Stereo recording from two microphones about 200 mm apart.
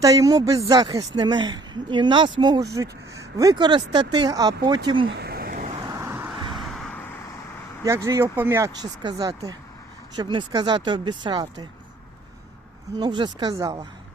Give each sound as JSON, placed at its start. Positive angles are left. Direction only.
{"t": 0.0, "sound": "speech", "side_deg": -15}
{"t": 5.0, "sound": "a sound", "side_deg": -55}
{"t": 5.9, "sound": "vehicle", "side_deg": -15}
{"t": 6.5, "sound": "vehicle", "side_deg": 0}
{"t": 7.9, "sound": "speech", "side_deg": -15}
{"t": 13.0, "sound": "speech", "side_deg": -20}